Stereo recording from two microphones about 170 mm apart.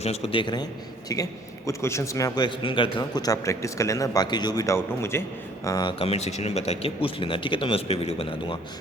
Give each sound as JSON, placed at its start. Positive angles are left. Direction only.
{"t": 0.0, "sound": "a man's voice", "side_deg": 40}
{"t": 3.2, "sound": "a man's voice", "side_deg": 20}